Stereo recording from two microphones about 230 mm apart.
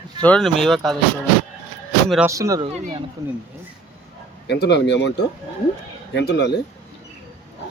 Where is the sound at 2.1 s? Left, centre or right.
Centre.